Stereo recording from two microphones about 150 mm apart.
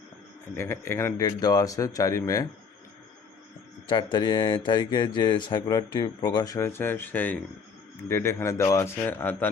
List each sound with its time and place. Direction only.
0.5 s speech: 15° left (ahead or behind)
3.8 s a man's voice: 30° left (ahead or behind); by 9.5 s 15° left (ahead or behind)